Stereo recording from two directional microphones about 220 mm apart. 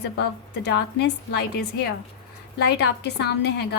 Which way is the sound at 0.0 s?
50° left (ahead or behind).